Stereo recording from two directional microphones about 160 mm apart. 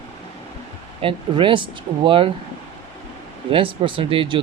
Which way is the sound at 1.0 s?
30° right (ahead or behind).